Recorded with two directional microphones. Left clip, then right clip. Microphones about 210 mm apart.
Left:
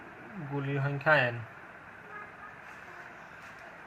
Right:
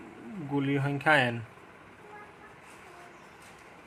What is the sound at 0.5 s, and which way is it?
Speech, 50° right (ahead or behind).